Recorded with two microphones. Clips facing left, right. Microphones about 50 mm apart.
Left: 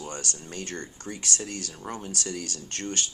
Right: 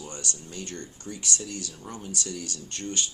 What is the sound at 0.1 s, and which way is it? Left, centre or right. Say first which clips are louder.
Speech: left 2 dB; left.